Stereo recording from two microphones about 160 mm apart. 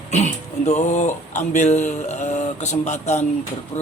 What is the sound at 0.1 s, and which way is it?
A man's voice, 45° left (ahead or behind).